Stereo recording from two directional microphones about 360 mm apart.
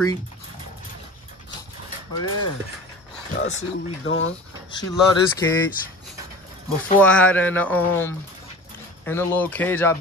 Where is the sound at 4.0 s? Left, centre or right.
Left.